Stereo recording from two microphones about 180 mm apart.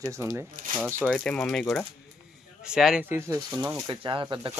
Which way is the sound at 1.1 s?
5° left (ahead or behind).